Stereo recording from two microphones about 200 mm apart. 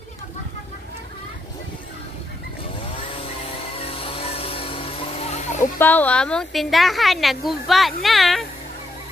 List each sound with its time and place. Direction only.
3.4 s music: 30° left (ahead or behind)
5.8 s a woman's voice: 10° left (ahead or behind)